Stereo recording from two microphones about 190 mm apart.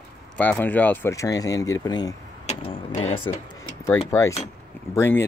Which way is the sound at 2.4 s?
30° left (ahead or behind).